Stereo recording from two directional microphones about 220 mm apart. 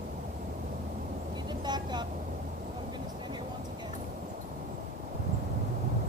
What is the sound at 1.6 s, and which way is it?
Vehicle, 20° right (ahead or behind).